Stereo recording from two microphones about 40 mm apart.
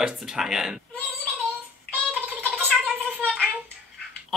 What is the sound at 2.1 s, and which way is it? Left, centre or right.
Gargling, right.